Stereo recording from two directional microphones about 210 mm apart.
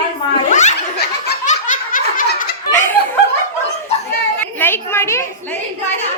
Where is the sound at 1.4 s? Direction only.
35° left (ahead or behind).